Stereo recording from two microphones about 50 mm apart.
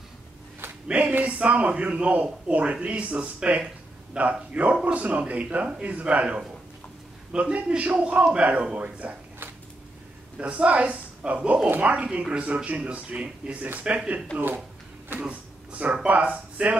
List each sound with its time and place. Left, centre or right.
0.8 s a man's voice: right
7.5 s a man's voice: right
10.3 s a woman's voice: right
15.1 s a sound: right
16.1 s a man's voice: right